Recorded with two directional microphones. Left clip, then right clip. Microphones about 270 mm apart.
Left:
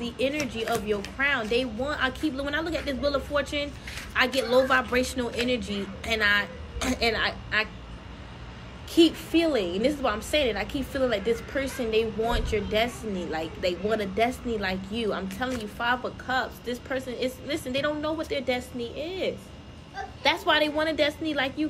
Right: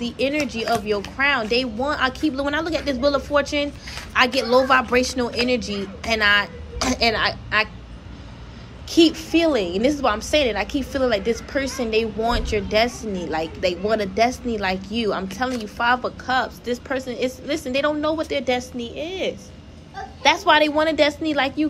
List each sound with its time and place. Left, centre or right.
0.0 s a woman's voice: centre
8.9 s a woman's voice: centre